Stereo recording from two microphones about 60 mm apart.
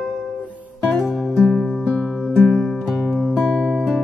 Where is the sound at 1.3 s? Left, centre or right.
Centre.